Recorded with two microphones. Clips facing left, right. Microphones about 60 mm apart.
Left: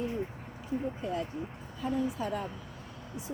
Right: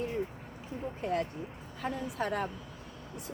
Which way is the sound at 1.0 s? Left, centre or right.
Right.